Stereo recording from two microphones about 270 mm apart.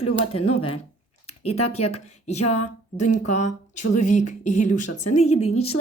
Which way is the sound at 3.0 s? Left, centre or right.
Left.